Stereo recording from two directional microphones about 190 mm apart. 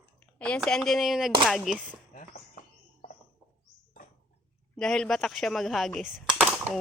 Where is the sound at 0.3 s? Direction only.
5° left (ahead or behind).